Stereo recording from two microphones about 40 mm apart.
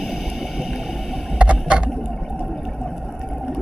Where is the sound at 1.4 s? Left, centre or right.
Right.